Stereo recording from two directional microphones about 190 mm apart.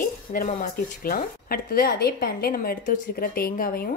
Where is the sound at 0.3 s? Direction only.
50° left (ahead or behind).